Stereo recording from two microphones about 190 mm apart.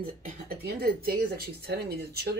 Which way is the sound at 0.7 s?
50° right (ahead or behind).